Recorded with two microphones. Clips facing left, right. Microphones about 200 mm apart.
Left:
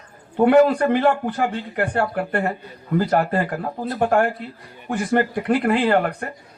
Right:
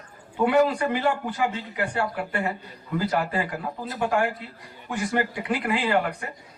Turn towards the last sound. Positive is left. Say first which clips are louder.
# left 5 dB
turn(degrees=55)  # may be behind; listen again after turning